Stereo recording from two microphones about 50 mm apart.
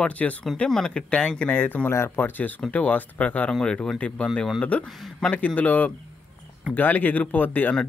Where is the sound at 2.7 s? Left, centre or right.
Left.